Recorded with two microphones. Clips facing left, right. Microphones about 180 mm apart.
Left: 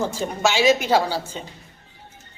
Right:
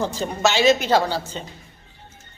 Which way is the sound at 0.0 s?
10° left (ahead or behind).